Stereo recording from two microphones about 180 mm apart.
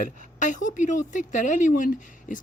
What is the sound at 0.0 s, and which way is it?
Speech, 45° left (ahead or behind).